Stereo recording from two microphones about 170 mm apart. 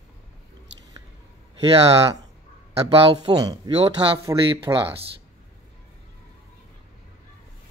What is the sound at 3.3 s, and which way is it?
Speech, 20° right (ahead or behind).